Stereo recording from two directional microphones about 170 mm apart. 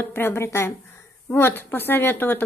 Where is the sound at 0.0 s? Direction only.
10° left (ahead or behind).